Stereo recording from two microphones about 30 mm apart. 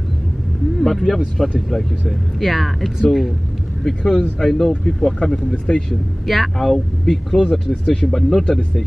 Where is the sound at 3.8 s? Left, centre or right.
Left.